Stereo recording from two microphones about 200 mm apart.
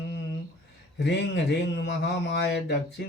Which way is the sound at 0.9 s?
60° left (ahead or behind).